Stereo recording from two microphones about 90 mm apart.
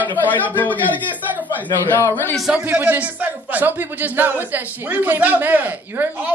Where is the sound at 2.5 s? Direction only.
20° right (ahead or behind).